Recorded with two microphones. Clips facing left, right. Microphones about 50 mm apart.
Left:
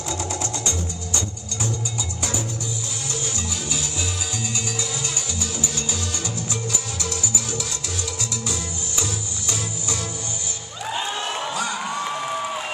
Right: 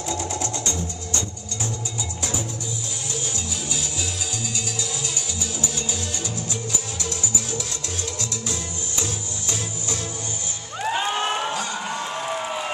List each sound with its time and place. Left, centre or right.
0.1 s sewing machine: left
5.4 s music: centre
10.9 s music: right